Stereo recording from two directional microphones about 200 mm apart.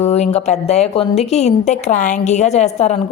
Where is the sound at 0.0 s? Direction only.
30° left (ahead or behind).